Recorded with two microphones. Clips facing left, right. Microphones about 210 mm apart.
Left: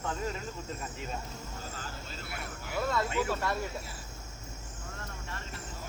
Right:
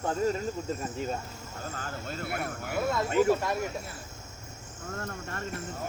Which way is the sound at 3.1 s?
45° right (ahead or behind).